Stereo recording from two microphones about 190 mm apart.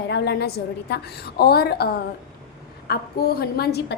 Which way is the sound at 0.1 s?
60° left (ahead or behind).